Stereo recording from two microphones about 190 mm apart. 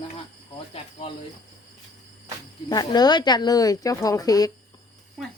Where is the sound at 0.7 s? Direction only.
30° left (ahead or behind).